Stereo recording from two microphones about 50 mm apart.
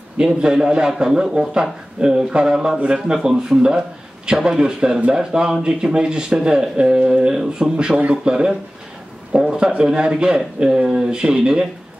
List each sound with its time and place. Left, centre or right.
0.2 s a man's voice: centre
2.8 s a man's voice: right